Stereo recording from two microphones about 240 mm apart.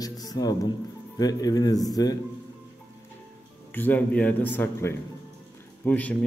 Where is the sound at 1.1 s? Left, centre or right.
Centre.